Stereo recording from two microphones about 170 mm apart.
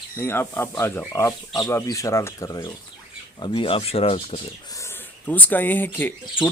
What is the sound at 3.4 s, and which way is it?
Speech, 30° left (ahead or behind).